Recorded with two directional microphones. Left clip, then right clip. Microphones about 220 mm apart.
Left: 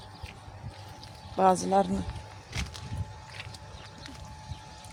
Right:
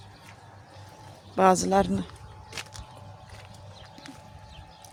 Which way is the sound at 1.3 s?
20° right (ahead or behind).